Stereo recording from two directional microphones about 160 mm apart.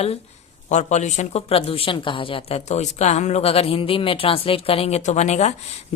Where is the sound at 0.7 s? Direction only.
45° left (ahead or behind).